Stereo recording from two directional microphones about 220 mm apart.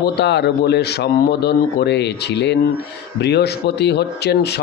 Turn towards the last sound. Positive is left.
turn(degrees=50)  # may be behind; listen again after turning